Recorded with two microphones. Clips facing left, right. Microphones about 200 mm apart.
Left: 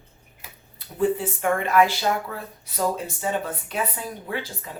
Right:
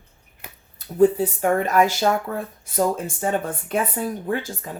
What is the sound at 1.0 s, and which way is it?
Speech, 40° right (ahead or behind).